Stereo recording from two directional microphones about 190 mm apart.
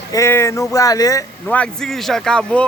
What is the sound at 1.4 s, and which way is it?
Speech, 5° left (ahead or behind).